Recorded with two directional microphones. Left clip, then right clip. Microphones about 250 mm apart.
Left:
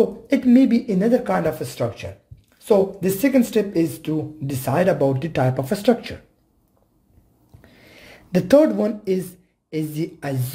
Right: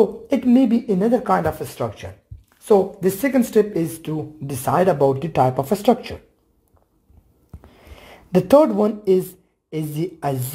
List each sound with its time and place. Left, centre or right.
0.3 s speech: centre
7.6 s a sound: centre
9.7 s speech: centre